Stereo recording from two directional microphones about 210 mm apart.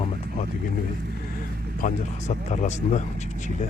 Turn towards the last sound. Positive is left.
turn(degrees=35)  # may be behind; listen again after turning